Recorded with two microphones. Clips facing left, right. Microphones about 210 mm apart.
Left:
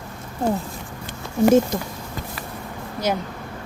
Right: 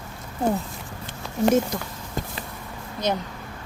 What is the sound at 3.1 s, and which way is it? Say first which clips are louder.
Speech: left 2 dB; 10° left (ahead or behind).